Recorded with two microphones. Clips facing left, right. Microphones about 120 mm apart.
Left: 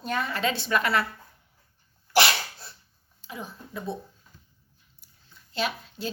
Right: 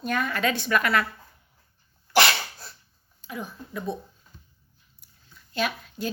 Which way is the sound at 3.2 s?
25° left (ahead or behind).